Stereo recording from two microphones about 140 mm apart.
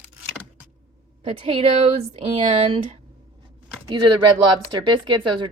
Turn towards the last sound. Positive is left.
turn(degrees=-35)  # may be behind; listen again after turning